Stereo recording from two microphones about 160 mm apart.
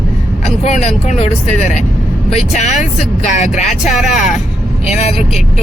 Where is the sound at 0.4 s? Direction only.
45° left (ahead or behind).